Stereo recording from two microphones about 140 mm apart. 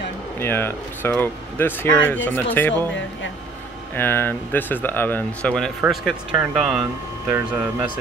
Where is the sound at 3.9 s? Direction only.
15° left (ahead or behind); by 6.8 s 5° right (ahead or behind).